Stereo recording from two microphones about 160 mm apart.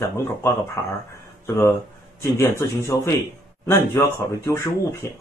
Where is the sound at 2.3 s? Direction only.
15° left (ahead or behind).